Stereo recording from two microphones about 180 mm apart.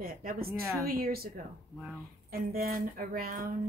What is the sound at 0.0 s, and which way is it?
Speech, 55° right (ahead or behind).